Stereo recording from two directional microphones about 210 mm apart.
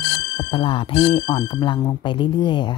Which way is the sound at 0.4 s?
25° left (ahead or behind).